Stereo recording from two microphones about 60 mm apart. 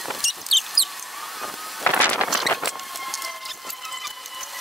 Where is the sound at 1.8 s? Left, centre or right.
Left.